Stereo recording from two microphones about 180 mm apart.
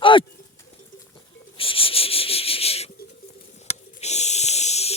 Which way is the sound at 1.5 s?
30° left (ahead or behind).